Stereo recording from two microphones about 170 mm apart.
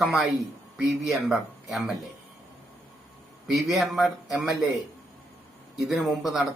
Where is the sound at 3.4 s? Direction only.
Centre (ahead or behind).